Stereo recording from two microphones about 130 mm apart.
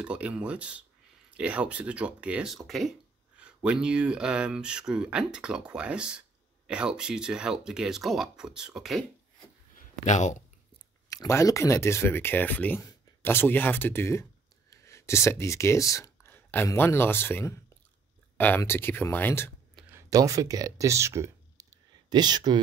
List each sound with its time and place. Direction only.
0.0 s speech: 10° right (ahead or behind)
10.0 s speech: 70° left (ahead or behind)
11.1 s speech: 25° left (ahead or behind)
18.6 s speech: 20° left (ahead or behind)
19.9 s speech: 25° right (ahead or behind)
22.1 s speech: 35° right (ahead or behind)